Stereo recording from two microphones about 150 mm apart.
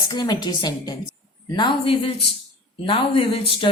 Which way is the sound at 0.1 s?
30° left (ahead or behind).